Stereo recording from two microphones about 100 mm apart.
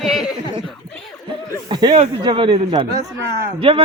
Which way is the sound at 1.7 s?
50° right (ahead or behind).